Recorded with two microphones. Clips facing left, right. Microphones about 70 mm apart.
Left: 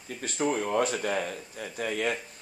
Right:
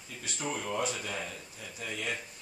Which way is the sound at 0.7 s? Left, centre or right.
Left.